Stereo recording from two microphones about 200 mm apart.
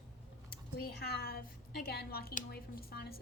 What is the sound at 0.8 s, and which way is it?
A woman's voice, 55° left (ahead or behind).